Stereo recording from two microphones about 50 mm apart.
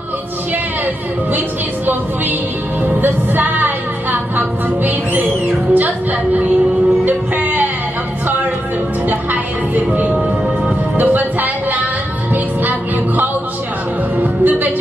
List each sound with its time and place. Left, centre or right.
2.8 s music: right
4.4 s speech: right
9.1 s music: right
11.0 s music: right